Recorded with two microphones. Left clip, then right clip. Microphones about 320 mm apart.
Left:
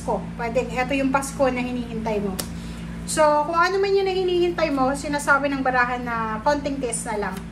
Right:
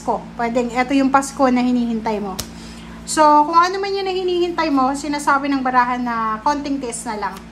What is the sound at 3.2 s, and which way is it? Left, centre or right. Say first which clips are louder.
A woman's voice: right 6 dB; centre.